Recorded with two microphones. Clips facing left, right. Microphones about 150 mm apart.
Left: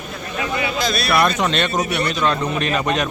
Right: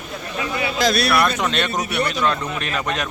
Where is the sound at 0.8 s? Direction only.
75° right (ahead or behind).